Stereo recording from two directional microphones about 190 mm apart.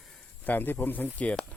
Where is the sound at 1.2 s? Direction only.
5° left (ahead or behind).